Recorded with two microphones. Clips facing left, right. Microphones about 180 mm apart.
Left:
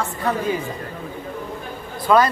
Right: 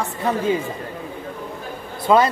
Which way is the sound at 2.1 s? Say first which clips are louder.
Even; 20° right (ahead or behind).